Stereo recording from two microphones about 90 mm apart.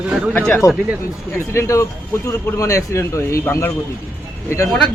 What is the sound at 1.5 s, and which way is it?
A man's voice, 35° left (ahead or behind).